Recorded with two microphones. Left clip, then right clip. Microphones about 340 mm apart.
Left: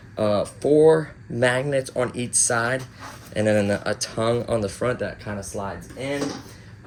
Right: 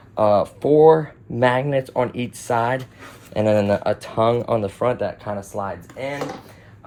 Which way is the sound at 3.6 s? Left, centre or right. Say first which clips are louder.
Right 3 dB; right.